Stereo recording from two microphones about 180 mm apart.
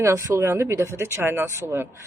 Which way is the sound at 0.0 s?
15° right (ahead or behind).